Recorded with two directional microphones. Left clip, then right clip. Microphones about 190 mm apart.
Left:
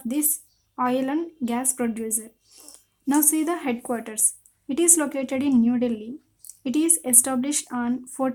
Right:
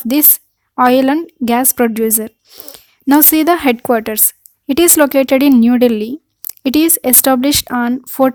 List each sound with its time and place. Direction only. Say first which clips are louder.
0.0 s a woman's voice: right 12 dB; 45° right (ahead or behind)